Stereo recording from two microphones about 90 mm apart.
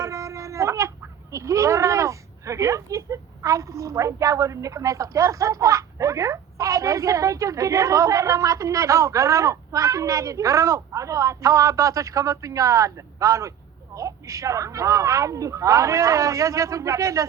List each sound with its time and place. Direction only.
0.0 s speech: 35° right (ahead or behind)